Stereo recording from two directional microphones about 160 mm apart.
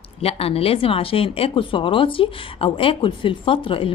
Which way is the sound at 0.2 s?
35° left (ahead or behind).